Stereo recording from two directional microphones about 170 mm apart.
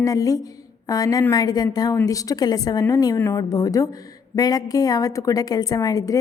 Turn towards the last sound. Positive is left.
turn(degrees=20)  # may be behind; listen again after turning